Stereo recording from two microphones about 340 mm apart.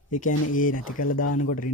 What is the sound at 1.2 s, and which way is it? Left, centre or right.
Speech, left.